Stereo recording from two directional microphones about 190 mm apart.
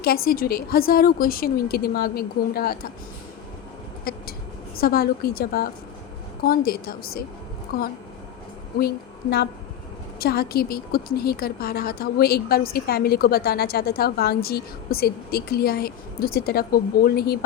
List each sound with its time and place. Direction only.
0.0 s a woman's voice: 50° left (ahead or behind)
4.1 s a sound: 50° left (ahead or behind)
4.8 s a woman's voice: 55° left (ahead or behind)
10.2 s a woman's voice: 55° left (ahead or behind)